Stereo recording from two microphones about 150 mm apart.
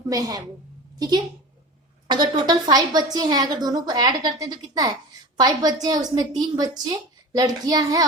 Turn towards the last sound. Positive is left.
turn(degrees=-25)  # may be behind; listen again after turning